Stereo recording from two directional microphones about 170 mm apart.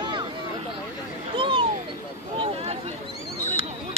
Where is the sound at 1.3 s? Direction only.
30° right (ahead or behind).